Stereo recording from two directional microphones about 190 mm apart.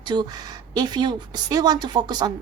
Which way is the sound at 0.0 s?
25° right (ahead or behind).